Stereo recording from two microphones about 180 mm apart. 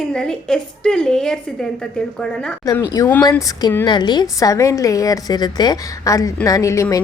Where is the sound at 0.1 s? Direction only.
5° left (ahead or behind).